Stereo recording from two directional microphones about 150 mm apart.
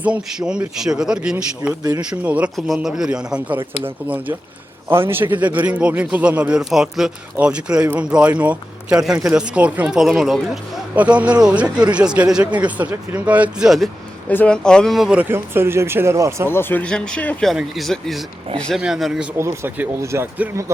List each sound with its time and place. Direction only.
0.0 s a man's voice: 5° right (ahead or behind)
16.5 s speech: 15° left (ahead or behind); by 19.3 s centre (ahead or behind)
19.4 s a man's voice: 15° right (ahead or behind)